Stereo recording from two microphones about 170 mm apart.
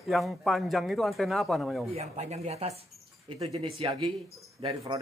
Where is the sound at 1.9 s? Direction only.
40° right (ahead or behind).